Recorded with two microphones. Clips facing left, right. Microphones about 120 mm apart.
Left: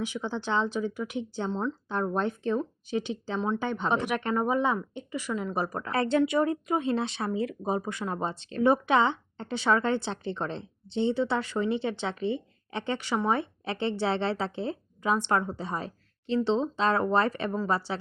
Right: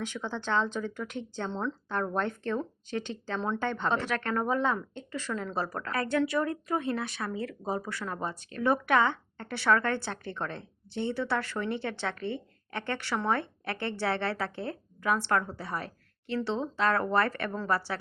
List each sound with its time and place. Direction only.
0.0 s speech: 15° left (ahead or behind)
1.9 s speech: 15° left (ahead or behind)
3.4 s speech: 5° left (ahead or behind)
3.7 s speech: 15° left (ahead or behind)
5.9 s speech: 25° left (ahead or behind)